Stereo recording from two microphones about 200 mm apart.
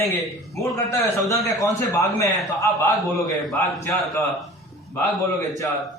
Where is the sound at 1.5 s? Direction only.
15° left (ahead or behind).